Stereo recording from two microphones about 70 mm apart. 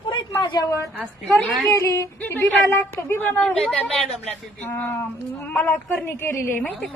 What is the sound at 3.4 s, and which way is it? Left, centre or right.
Speech, centre.